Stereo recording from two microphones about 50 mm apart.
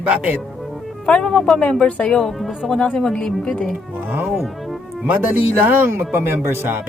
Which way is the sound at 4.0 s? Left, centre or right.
Right.